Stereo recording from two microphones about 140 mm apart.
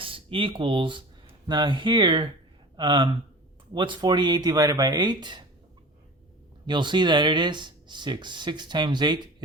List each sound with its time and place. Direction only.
0.0 s speech: 40° right (ahead or behind)
6.7 s speech: 30° right (ahead or behind)